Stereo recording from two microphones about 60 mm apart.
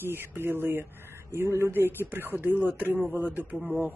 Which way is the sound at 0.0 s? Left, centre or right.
Right.